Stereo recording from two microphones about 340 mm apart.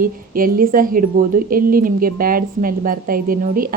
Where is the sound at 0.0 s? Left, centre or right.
Right.